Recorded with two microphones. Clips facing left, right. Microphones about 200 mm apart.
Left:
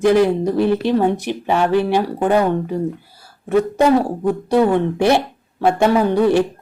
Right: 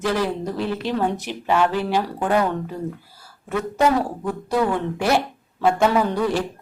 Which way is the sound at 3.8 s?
30° left (ahead or behind).